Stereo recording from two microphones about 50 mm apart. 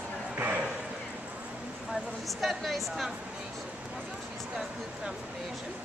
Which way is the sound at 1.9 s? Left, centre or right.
Centre.